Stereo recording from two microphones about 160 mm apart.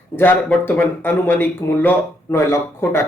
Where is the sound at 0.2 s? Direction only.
10° left (ahead or behind).